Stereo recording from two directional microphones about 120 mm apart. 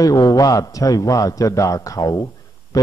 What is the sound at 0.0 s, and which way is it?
A man's voice, 30° left (ahead or behind).